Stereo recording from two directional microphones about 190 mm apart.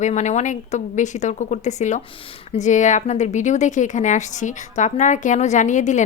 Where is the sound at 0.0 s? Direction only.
40° left (ahead or behind).